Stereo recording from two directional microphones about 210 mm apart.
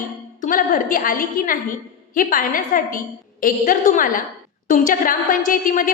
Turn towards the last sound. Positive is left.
turn(degrees=40)  # may be behind; listen again after turning